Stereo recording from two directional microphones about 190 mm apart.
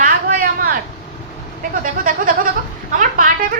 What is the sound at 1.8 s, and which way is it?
A woman's voice, 45° right (ahead or behind).